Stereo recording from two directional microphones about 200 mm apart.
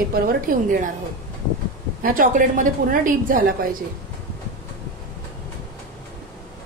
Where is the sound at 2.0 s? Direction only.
45° right (ahead or behind).